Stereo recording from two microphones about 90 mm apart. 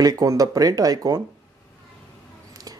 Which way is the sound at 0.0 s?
40° right (ahead or behind).